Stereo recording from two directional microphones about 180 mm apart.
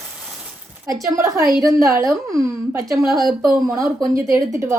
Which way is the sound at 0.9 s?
15° right (ahead or behind).